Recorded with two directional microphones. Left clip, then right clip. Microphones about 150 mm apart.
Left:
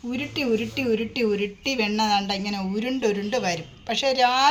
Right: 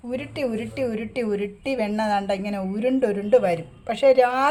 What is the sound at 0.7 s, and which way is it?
A woman's voice, 85° right.